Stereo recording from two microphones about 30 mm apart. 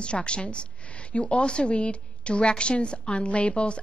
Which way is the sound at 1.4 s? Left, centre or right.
Left.